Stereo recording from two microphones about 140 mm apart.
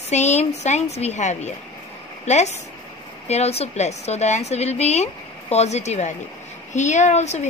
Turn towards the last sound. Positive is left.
turn(degrees=55)  # may be behind; listen again after turning